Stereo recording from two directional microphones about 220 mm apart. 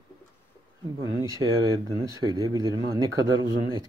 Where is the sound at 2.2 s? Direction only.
15° right (ahead or behind).